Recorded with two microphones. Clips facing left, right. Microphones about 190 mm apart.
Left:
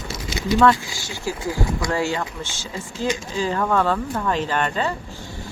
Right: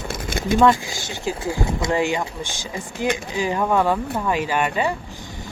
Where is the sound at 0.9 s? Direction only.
20° right (ahead or behind).